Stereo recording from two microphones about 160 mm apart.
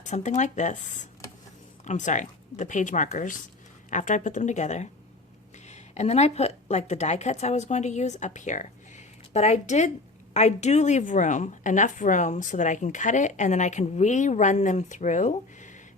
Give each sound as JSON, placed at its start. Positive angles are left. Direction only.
{"t": 0.0, "sound": "a woman's voice", "side_deg": 45}
{"t": 1.8, "sound": "a woman's voice", "side_deg": 50}